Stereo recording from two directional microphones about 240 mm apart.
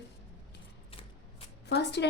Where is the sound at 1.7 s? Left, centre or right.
Left.